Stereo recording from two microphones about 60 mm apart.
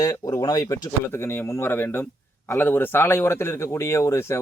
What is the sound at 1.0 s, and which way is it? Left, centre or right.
A man's voice, left.